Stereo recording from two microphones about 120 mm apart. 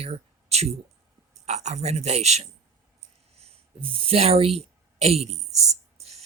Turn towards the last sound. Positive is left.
turn(degrees=-60)  # may be behind; listen again after turning